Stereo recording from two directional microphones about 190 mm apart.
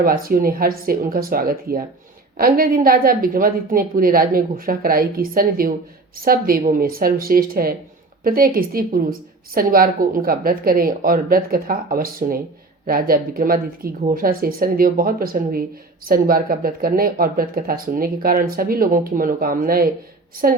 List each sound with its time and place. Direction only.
0.0 s speech: 50° right (ahead or behind)